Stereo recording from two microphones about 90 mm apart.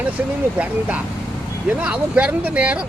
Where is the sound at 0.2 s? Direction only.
15° right (ahead or behind).